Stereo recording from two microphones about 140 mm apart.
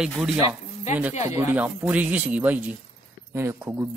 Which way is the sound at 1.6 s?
10° right (ahead or behind).